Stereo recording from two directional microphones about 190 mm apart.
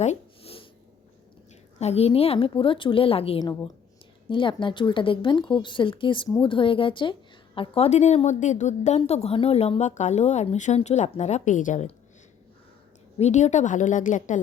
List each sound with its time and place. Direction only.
0.0 s a sound: 35° left (ahead or behind)
1.8 s a woman's voice: 35° left (ahead or behind)
13.1 s a woman's voice: 35° left (ahead or behind)